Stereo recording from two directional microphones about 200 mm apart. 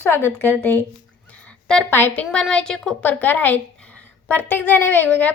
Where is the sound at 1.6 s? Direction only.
5° left (ahead or behind).